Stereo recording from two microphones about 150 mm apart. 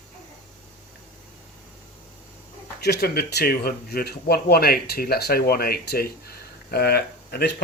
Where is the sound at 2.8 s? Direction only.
90° left.